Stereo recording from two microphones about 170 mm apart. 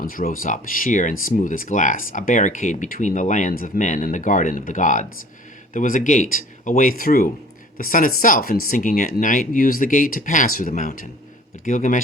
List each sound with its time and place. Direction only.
0.0 s speech: 55° left (ahead or behind)